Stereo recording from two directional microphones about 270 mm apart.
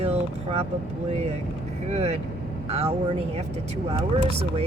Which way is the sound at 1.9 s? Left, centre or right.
Right.